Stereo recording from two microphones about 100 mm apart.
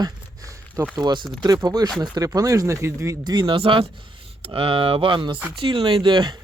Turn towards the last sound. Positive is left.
turn(degrees=-50)  # may be behind; listen again after turning